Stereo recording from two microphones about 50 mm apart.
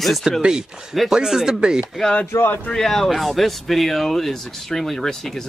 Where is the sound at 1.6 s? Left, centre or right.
Centre.